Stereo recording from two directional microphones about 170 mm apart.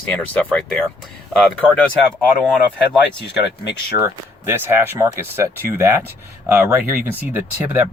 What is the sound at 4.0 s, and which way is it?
Speech, 15° right (ahead or behind).